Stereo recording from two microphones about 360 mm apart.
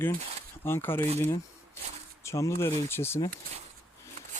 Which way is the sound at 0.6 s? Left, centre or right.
Centre.